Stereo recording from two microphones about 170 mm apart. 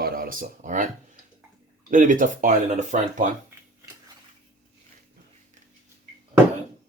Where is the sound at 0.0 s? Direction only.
55° right (ahead or behind).